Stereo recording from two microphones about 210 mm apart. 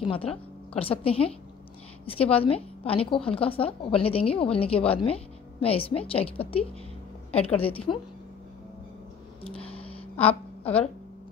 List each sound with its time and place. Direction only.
0.0 s a woman's voice: 25° left (ahead or behind)
2.3 s a woman's voice: 25° left (ahead or behind)
9.4 s music: 25° left (ahead or behind)
10.1 s a sound: 10° left (ahead or behind)